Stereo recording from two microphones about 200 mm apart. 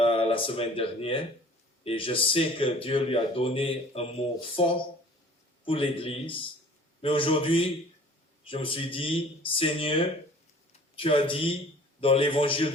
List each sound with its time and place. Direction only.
0.0 s a man's voice: 25° left (ahead or behind)